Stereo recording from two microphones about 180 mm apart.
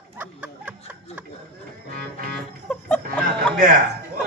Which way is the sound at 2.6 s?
5° left (ahead or behind).